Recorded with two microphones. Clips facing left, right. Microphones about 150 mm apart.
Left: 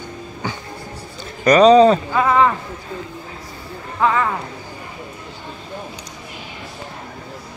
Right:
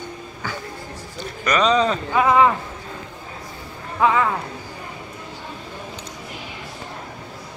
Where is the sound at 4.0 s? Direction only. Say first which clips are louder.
Even; 5° right (ahead or behind).